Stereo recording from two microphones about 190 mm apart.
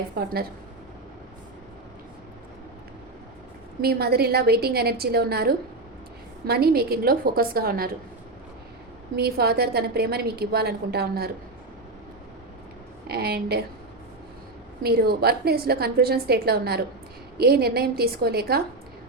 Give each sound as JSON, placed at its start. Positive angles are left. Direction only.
{"t": 0.2, "sound": "a woman's voice", "side_deg": -55}
{"t": 3.8, "sound": "a woman's voice", "side_deg": -55}
{"t": 9.1, "sound": "a woman's voice", "side_deg": -55}
{"t": 13.1, "sound": "a woman's voice", "side_deg": -55}
{"t": 14.8, "sound": "a woman's voice", "side_deg": -55}